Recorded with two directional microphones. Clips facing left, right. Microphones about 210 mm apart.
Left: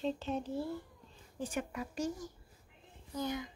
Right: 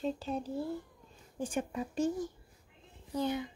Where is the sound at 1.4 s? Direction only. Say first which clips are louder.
Right 3 dB; 30° right (ahead or behind).